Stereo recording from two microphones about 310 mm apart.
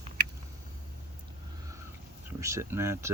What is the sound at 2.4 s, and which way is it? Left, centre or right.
Speech, centre.